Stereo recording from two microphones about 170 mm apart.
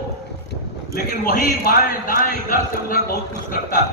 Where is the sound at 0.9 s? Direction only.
55° left (ahead or behind).